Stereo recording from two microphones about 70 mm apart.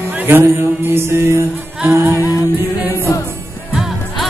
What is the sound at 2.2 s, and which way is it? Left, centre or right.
Music, left.